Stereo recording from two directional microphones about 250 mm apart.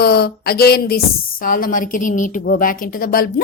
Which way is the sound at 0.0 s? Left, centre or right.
Left.